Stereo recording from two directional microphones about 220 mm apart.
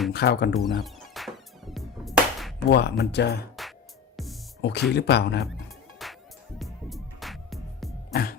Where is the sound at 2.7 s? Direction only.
50° left (ahead or behind).